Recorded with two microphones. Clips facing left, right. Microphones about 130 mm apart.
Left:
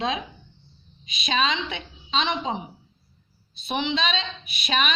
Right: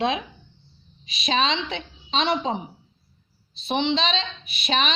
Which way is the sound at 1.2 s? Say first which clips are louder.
Right 1 dB; 35° right (ahead or behind).